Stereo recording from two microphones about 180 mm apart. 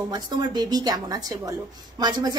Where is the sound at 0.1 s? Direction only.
25° right (ahead or behind).